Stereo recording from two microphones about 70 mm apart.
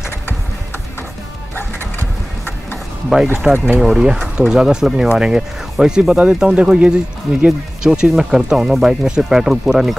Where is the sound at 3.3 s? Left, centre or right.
Centre.